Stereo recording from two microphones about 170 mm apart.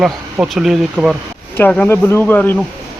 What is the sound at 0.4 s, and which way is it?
Speech, centre (ahead or behind).